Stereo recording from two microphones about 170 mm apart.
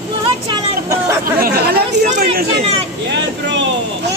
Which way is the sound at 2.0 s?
45° right (ahead or behind).